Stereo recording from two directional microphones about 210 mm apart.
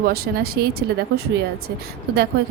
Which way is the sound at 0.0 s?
45° right (ahead or behind).